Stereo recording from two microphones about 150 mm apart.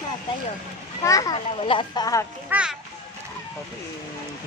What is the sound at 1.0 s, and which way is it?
Speech, 25° left (ahead or behind).